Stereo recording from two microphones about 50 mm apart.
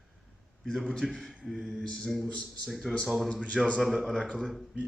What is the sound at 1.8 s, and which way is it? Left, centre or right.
Speech, centre.